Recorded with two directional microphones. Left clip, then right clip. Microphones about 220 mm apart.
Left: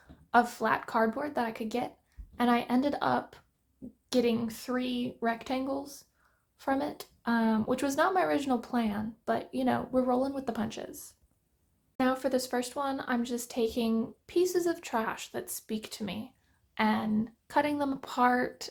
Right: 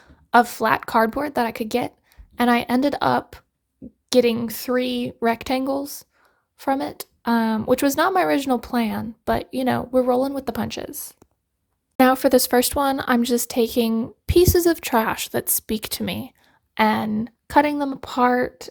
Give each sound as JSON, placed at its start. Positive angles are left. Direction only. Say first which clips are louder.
{"t": 0.0, "sound": "speech", "louder": "right 9 dB", "side_deg": -40}